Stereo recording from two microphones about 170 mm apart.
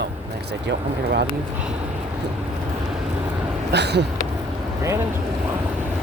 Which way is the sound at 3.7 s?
80° right.